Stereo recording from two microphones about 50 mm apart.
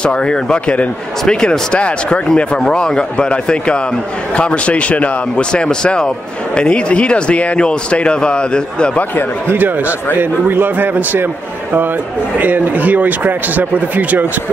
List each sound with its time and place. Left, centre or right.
0.0 s speech: centre
5.5 s speech: centre
9.5 s speech: right
12.4 s speech: right